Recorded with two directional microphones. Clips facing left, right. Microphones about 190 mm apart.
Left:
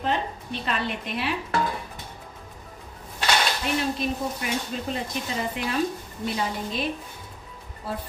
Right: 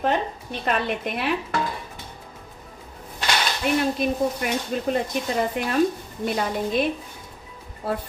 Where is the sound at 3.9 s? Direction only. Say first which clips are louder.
Right 5 dB; 55° right (ahead or behind).